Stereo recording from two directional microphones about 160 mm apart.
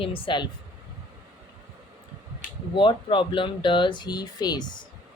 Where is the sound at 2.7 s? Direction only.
30° left (ahead or behind).